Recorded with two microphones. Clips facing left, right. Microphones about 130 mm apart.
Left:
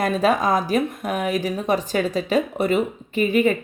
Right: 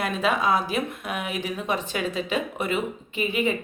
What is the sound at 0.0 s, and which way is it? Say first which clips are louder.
Speech: left 5 dB; 40° left (ahead or behind).